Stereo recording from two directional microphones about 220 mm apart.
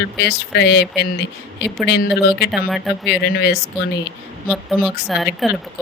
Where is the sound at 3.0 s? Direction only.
50° left (ahead or behind).